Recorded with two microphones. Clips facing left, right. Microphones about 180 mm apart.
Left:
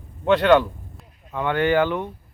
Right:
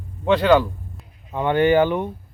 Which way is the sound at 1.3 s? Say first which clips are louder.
Right 3 dB; 20° right (ahead or behind).